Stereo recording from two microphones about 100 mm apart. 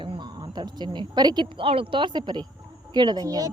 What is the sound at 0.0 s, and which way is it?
A child's voice, 50° right (ahead or behind).